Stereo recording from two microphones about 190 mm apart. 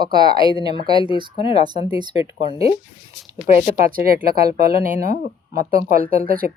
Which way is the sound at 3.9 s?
50° right (ahead or behind).